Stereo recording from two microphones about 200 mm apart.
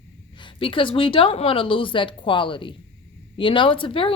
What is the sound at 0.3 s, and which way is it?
Speech, 25° left (ahead or behind).